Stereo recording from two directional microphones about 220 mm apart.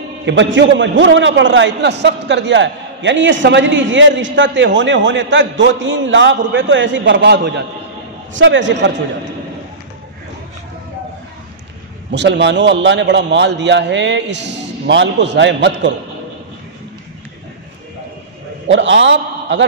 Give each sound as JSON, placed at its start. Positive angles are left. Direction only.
{"t": 0.2, "sound": "a man's voice", "side_deg": -55}
{"t": 12.1, "sound": "a man's voice", "side_deg": -50}
{"t": 18.7, "sound": "a man's voice", "side_deg": -55}